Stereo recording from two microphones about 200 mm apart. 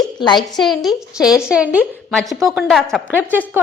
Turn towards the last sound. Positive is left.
turn(degrees=-10)  # may be behind; listen again after turning